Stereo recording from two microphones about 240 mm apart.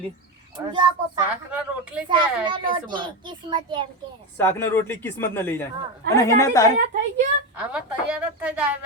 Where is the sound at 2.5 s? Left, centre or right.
Centre.